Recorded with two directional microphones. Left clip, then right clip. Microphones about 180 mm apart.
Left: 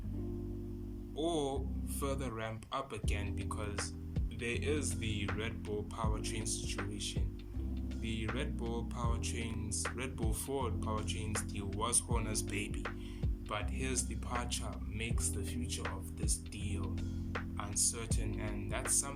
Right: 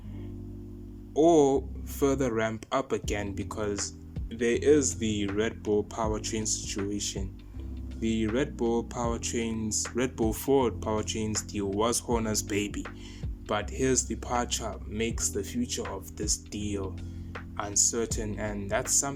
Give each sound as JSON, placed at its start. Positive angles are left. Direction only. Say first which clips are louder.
{"t": 1.1, "sound": "speech", "louder": "right 15 dB", "side_deg": -50}